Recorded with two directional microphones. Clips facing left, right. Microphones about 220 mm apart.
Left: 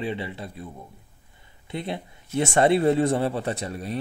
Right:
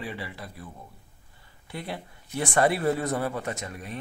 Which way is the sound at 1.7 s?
20° left (ahead or behind).